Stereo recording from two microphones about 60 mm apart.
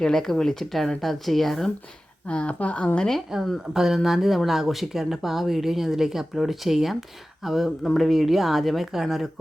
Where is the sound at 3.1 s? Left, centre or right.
Centre.